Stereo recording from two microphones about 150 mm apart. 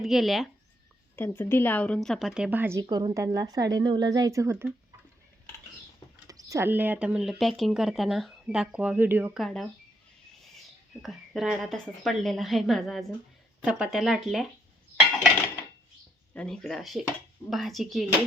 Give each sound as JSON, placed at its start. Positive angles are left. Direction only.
{"t": 0.0, "sound": "a woman's voice", "side_deg": 0}
{"t": 1.1, "sound": "a woman's voice", "side_deg": 15}
{"t": 2.9, "sound": "a woman's voice", "side_deg": -30}
{"t": 6.2, "sound": "speech", "side_deg": -20}
{"t": 9.4, "sound": "a woman's voice", "side_deg": 0}
{"t": 11.0, "sound": "a woman's voice", "side_deg": 0}
{"t": 16.3, "sound": "a woman's voice", "side_deg": 5}